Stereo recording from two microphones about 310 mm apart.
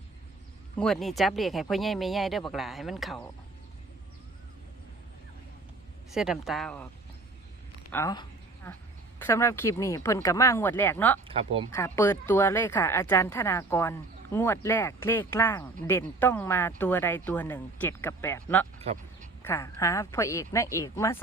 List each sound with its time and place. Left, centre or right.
0.8 s speech: centre
6.1 s speech: centre
7.9 s a sound: centre
9.1 s speech: centre
11.3 s speech: centre
11.7 s speech: centre
18.8 s speech: centre
19.4 s speech: centre